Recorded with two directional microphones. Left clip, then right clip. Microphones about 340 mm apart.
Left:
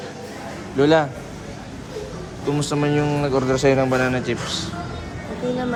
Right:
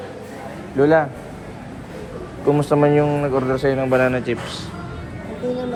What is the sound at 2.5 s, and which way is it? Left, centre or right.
Speech, centre.